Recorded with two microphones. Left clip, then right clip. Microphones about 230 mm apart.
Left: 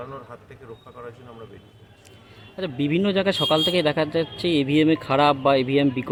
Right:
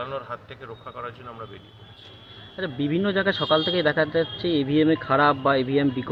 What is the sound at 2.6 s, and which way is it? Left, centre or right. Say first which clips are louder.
Speech: left 2 dB; left.